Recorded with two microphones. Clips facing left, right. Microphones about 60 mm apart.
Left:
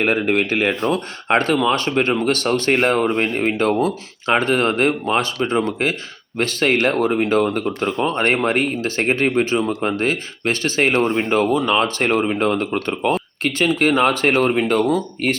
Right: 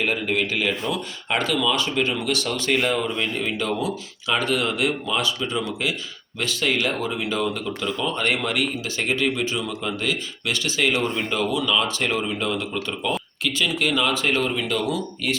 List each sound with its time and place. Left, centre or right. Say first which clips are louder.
0.0 s speech: left 5 dB; left